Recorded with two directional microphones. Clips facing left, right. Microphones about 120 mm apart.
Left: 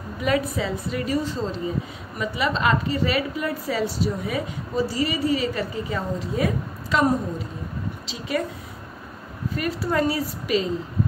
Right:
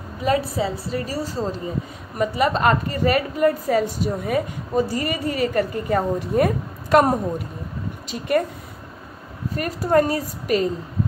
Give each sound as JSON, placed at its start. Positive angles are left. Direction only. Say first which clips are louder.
{"t": 0.2, "sound": "a woman's voice", "louder": "right 2 dB", "side_deg": -35}
{"t": 9.6, "sound": "a woman's voice", "louder": "right 5 dB", "side_deg": -45}